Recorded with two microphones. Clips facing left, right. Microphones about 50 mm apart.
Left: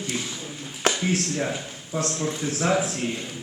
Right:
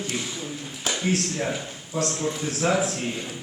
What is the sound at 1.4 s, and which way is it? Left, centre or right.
A man's voice, centre.